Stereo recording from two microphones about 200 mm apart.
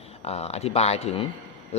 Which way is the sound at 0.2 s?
30° left (ahead or behind).